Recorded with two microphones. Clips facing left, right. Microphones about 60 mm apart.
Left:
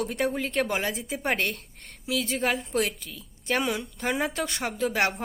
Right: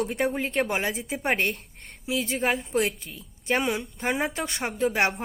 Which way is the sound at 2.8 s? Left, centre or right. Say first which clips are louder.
Right 2 dB; right.